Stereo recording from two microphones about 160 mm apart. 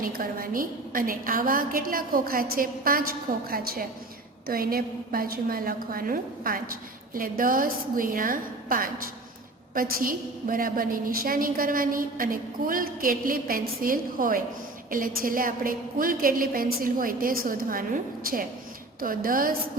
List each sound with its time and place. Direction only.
0.0 s a woman's voice: 65° right (ahead or behind)